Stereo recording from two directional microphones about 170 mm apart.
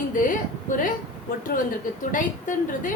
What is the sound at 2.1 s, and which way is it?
Speech, 50° left (ahead or behind).